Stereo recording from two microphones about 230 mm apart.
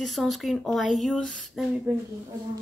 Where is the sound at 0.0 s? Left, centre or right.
Centre.